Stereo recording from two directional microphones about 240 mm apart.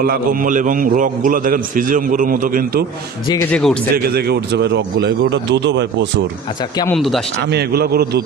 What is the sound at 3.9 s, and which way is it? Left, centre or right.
Speech, right.